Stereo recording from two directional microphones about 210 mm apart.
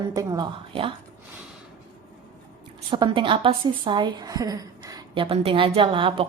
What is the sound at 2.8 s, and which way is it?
Speech, 25° right (ahead or behind).